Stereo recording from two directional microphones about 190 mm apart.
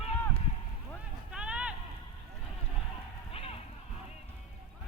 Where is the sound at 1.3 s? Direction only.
5° right (ahead or behind).